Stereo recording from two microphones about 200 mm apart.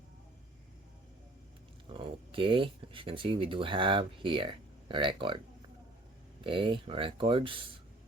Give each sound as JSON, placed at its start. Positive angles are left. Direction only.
{"t": 1.9, "sound": "speech", "side_deg": -25}
{"t": 6.4, "sound": "speech", "side_deg": -25}